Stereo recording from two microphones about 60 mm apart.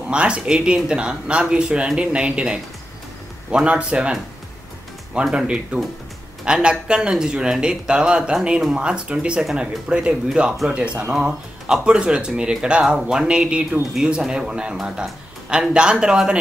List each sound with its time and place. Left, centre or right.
0.1 s speech: centre